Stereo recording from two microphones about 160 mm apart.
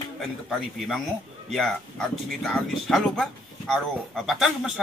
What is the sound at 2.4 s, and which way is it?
A man's voice, centre (ahead or behind).